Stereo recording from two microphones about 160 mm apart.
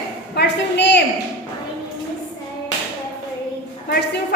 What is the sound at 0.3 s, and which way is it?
Speech, 90° left.